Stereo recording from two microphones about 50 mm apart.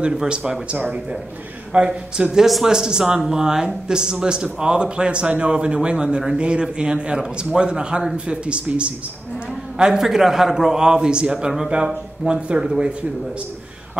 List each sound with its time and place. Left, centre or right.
0.1 s speech: centre
0.7 s speech: right
1.7 s speech: centre
9.8 s speech: centre
12.3 s speech: right
12.6 s speech: centre